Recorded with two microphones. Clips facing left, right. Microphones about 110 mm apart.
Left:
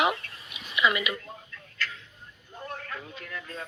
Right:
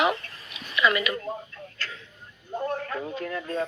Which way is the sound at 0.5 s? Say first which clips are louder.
Right 2 dB; 20° left (ahead or behind).